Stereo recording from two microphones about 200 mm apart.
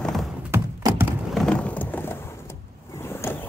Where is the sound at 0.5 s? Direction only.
10° right (ahead or behind).